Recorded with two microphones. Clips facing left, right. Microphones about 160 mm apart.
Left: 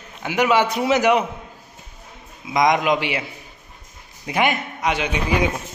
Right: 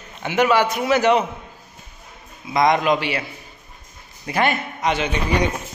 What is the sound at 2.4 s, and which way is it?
Speech, 15° left (ahead or behind).